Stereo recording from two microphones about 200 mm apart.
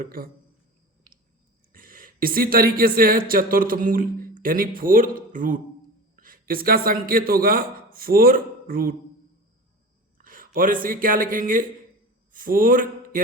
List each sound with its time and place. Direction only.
0.0 s speech: 45° right (ahead or behind)
1.7 s a man's voice: 45° right (ahead or behind)
10.2 s speech: 45° right (ahead or behind)